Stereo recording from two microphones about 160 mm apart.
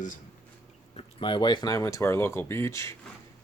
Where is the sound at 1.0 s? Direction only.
30° left (ahead or behind).